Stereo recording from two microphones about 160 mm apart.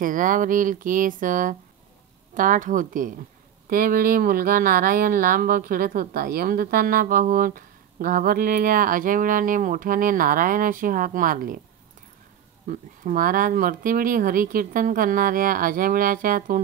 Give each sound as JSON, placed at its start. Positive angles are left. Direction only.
{"t": 0.0, "sound": "speech", "side_deg": -55}
{"t": 12.6, "sound": "speech", "side_deg": -55}